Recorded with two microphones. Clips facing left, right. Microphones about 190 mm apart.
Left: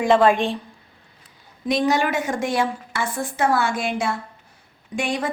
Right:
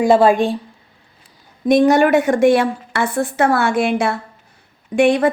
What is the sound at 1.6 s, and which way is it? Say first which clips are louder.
A woman's voice: right 8 dB; 50° right (ahead or behind).